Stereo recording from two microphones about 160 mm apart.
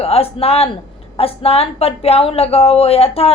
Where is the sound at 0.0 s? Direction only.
35° left (ahead or behind).